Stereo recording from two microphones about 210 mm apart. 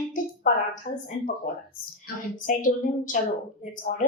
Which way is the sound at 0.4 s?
35° left (ahead or behind).